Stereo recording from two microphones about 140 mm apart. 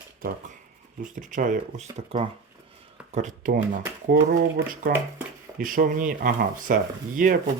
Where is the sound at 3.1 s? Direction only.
60° right (ahead or behind).